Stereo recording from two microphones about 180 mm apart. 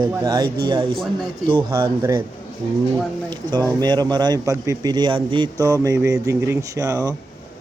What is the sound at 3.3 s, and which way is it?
Speech, 25° right (ahead or behind).